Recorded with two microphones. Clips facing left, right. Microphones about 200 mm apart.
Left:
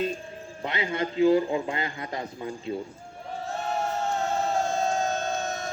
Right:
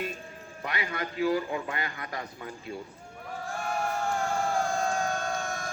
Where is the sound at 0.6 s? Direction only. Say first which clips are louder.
Left 5 dB; 25° left (ahead or behind).